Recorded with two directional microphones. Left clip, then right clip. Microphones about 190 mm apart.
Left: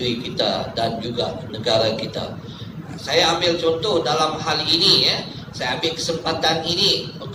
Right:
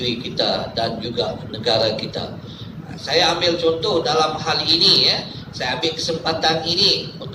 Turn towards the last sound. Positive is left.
turn(degrees=-20)  # may be behind; listen again after turning